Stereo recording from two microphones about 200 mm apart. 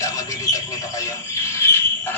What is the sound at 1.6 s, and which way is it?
Frog, 10° left (ahead or behind).